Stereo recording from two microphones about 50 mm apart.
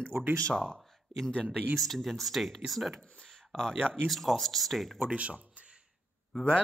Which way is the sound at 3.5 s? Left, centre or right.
Centre.